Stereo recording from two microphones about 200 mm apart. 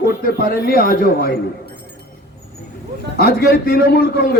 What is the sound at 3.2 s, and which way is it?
A man's voice, 45° left (ahead or behind).